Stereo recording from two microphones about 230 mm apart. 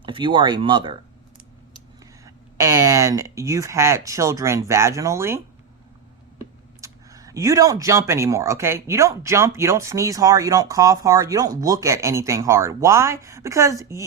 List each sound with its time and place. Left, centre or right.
0.0 s speech: right
2.2 s speech: centre
6.4 s speech: centre